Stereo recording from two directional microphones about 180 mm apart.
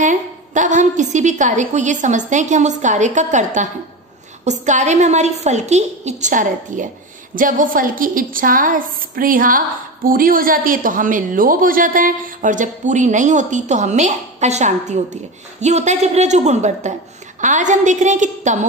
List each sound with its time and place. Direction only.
0.0 s a woman's voice: 45° right (ahead or behind)